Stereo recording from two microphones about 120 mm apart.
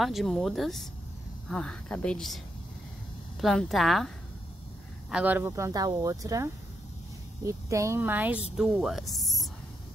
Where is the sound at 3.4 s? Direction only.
Centre (ahead or behind).